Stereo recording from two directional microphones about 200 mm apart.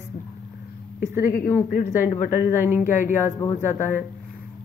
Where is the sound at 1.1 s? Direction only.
45° left (ahead or behind).